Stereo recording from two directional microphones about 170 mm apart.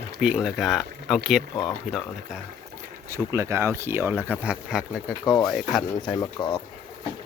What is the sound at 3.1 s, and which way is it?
Speech, 15° right (ahead or behind).